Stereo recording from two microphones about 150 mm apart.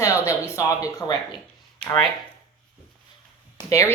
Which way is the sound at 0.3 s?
20° left (ahead or behind).